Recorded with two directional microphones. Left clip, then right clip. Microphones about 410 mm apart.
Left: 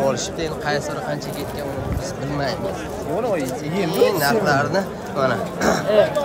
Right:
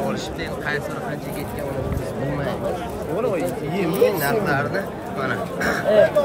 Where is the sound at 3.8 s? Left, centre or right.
Centre.